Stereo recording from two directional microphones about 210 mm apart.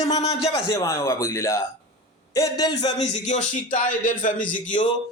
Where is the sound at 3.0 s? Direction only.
35° left (ahead or behind).